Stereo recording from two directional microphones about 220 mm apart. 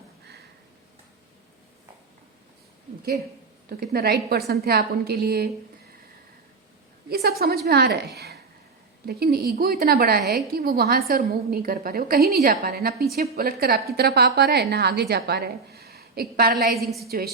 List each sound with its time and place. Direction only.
3.7 s a woman's voice: 45° right (ahead or behind)
7.1 s a woman's voice: 45° right (ahead or behind)
16.6 s a woman's voice: centre (ahead or behind)